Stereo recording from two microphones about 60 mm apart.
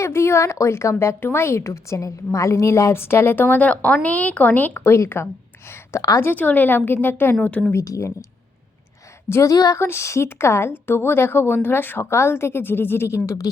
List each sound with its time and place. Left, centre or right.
0.0 s speech: left
3.0 s speech: left
4.9 s a woman's voice: left
6.2 s a woman's voice: left
7.7 s speech: left
9.5 s speech: left
9.7 s speech: left